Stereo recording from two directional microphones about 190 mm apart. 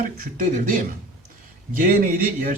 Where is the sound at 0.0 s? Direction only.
45° right (ahead or behind).